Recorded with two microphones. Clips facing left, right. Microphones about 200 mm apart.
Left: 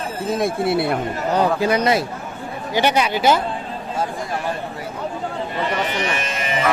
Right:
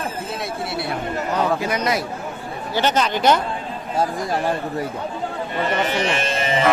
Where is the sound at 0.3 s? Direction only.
50° left (ahead or behind).